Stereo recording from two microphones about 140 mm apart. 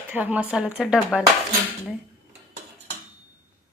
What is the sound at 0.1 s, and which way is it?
Speech, 10° right (ahead or behind).